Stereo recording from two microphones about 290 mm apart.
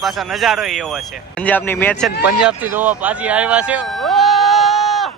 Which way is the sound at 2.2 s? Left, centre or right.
Centre.